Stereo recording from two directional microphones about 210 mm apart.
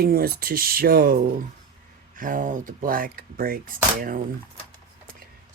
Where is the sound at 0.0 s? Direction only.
45° right (ahead or behind).